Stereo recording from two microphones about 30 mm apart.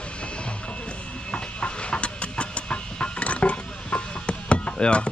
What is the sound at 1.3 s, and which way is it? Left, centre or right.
Train, left.